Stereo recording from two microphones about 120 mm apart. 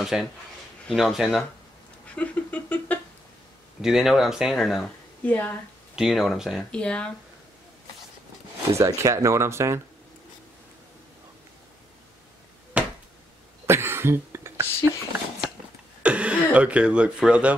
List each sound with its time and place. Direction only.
0.0 s speech: 5° right (ahead or behind)
2.1 s a sound: 10° left (ahead or behind)
3.8 s speech: centre (ahead or behind)
5.2 s speech: 15° left (ahead or behind)
5.9 s speech: centre (ahead or behind)
6.7 s speech: 10° left (ahead or behind)
8.7 s speech: 25° right (ahead or behind)
12.7 s finger snapping: 10° right (ahead or behind)
13.7 s cough: 20° right (ahead or behind)
16.0 s a sound: 10° right (ahead or behind)
16.5 s speech: 10° right (ahead or behind)